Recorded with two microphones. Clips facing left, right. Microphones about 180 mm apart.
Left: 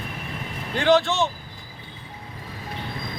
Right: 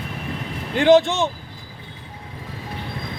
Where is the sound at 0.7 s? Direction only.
15° right (ahead or behind).